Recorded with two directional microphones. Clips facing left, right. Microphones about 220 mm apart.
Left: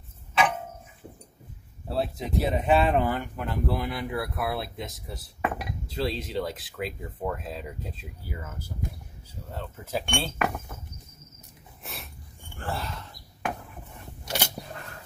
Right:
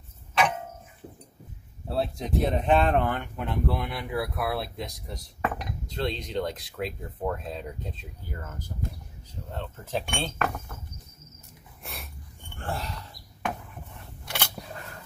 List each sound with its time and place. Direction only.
0.3 s tick-tock: centre (ahead or behind)
1.9 s speech: centre (ahead or behind)
10.0 s speech: 5° right (ahead or behind)
11.8 s a sound: centre (ahead or behind)
14.2 s scissors: 40° left (ahead or behind)